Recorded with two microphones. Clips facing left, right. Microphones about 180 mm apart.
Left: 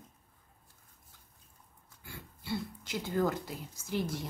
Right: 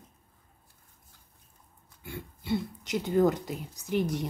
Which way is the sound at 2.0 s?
20° right (ahead or behind).